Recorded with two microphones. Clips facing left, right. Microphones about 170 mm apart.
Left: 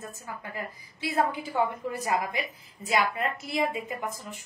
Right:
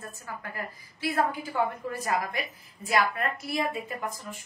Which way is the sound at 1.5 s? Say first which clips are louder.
Left 3 dB; 15° left (ahead or behind).